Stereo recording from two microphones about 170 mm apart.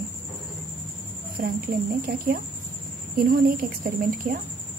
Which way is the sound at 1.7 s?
60° right (ahead or behind).